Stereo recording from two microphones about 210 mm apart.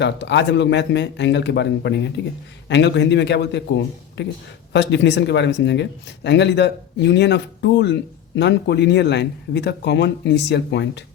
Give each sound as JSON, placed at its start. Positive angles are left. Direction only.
{"t": 0.0, "sound": "speech", "side_deg": 55}